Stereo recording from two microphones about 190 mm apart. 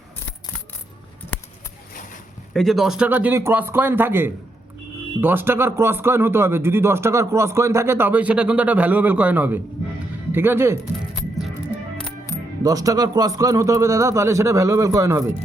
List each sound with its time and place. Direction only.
2.5 s speech: centre (ahead or behind)
12.6 s speech: 20° right (ahead or behind)